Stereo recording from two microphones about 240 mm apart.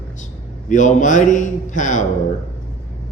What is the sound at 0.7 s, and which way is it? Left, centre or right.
A man's voice, left.